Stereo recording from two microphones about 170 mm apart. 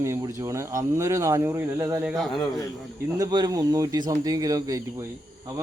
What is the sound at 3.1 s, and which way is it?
Speech, 20° right (ahead or behind).